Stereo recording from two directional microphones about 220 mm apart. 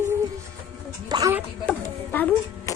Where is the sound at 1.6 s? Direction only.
5° left (ahead or behind).